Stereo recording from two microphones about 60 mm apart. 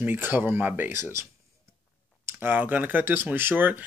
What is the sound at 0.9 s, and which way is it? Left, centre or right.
Speech, right.